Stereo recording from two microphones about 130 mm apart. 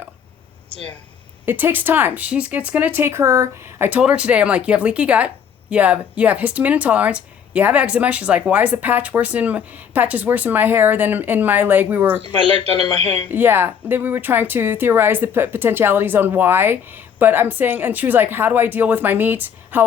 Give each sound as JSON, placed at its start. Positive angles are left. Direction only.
{"t": 1.5, "sound": "speech", "side_deg": -15}
{"t": 3.8, "sound": "speech", "side_deg": -10}
{"t": 12.4, "sound": "speech", "side_deg": 40}
{"t": 13.2, "sound": "speech", "side_deg": -15}